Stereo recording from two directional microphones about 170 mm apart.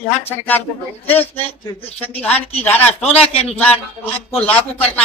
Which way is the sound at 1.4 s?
35° left (ahead or behind).